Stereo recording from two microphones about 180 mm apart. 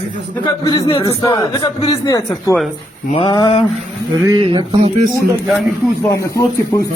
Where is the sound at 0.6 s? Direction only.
20° left (ahead or behind).